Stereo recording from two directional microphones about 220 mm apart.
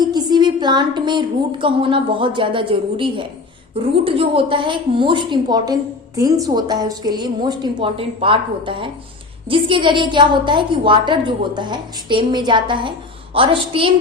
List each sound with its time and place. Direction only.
0.0 s a woman's voice: 20° right (ahead or behind)